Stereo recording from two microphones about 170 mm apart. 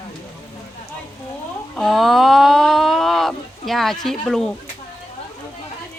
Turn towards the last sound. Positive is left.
turn(degrees=0)  # may be behind; listen again after turning